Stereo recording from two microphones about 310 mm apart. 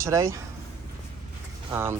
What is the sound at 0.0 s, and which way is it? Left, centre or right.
Speech, centre.